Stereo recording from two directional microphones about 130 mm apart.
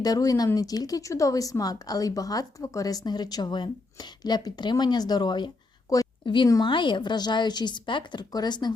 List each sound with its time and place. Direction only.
0.0 s a woman's voice: 30° left (ahead or behind)